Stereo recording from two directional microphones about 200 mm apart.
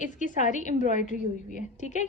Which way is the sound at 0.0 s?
40° left (ahead or behind).